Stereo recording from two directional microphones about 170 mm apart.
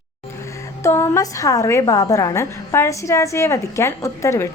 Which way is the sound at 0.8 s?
15° left (ahead or behind).